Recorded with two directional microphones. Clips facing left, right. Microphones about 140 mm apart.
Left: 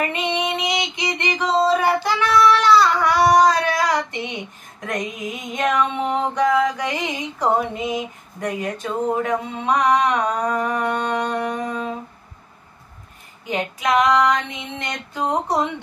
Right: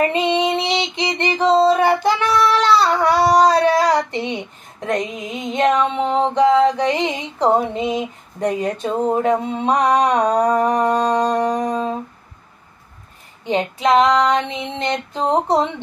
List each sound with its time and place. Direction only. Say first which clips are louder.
0.0 s female singing: right 6 dB; 30° right (ahead or behind)
2.2 s child singing: left 4 dB; 30° right (ahead or behind)
13.5 s female singing: right 5 dB; 30° right (ahead or behind)